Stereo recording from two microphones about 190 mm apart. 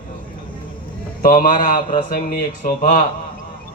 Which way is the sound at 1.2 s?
45° left (ahead or behind).